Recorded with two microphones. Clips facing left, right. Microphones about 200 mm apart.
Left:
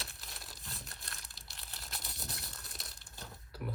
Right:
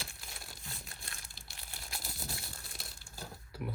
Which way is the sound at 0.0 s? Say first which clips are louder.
Right 1 dB; centre (ahead or behind).